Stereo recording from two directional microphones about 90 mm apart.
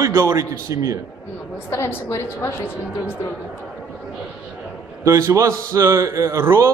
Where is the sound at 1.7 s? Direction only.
30° left (ahead or behind).